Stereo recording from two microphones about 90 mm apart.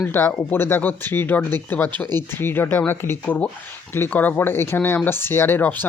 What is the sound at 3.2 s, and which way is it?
Speech, 15° left (ahead or behind).